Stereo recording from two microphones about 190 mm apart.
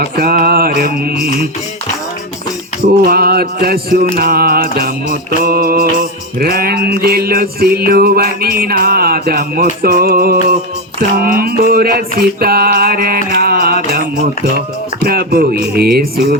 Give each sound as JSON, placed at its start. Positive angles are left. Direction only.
{"t": 0.0, "sound": "mantra", "side_deg": -55}
{"t": 2.8, "sound": "mantra", "side_deg": -55}
{"t": 11.2, "sound": "music", "side_deg": -50}
{"t": 15.0, "sound": "mantra", "side_deg": -55}